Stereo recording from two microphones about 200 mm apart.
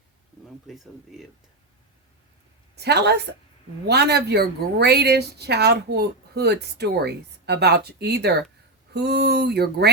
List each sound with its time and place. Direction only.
0.7 s speech: centre (ahead or behind)
2.7 s speech: 55° right (ahead or behind)